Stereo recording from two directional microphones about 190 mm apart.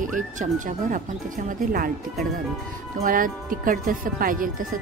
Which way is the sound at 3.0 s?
45° right (ahead or behind).